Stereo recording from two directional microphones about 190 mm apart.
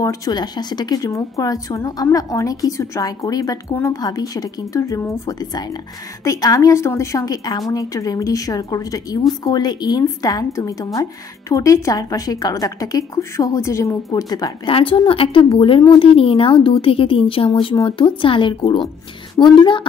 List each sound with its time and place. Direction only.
0.0 s speech: 20° left (ahead or behind)